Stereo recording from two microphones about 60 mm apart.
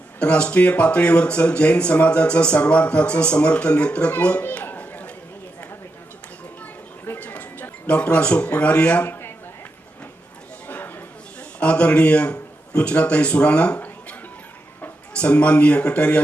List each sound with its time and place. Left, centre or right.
0.2 s speech: centre
7.2 s speech: left
10.7 s a sound: left
11.3 s a man's voice: centre